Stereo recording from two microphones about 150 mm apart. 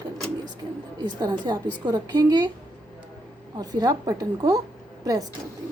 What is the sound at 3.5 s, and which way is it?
A woman's voice, 25° right (ahead or behind).